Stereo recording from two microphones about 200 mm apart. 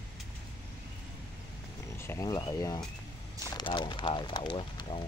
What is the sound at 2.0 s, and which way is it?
Speech, 15° left (ahead or behind).